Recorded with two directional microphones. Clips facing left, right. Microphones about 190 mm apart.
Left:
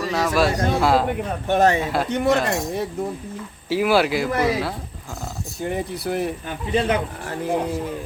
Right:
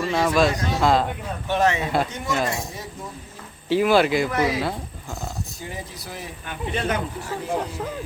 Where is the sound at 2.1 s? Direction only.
60° left (ahead or behind).